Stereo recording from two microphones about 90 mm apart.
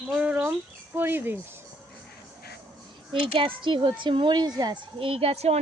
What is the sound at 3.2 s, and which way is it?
A child's voice, 70° right (ahead or behind).